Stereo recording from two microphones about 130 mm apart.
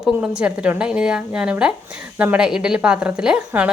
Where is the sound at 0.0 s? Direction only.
10° right (ahead or behind).